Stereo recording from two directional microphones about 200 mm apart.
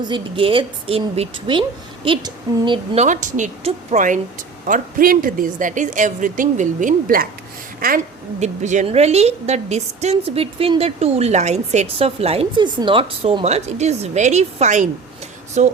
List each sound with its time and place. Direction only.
0.0 s a woman's voice: 25° right (ahead or behind)